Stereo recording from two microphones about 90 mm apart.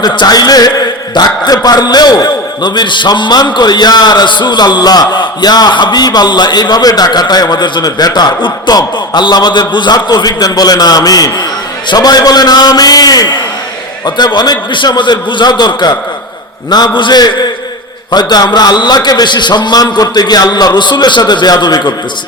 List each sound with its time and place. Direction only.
0.0 s a man's voice: 45° left (ahead or behind)